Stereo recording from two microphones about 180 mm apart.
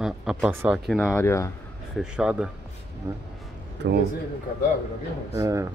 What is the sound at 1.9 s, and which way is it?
Speech, 5° right (ahead or behind).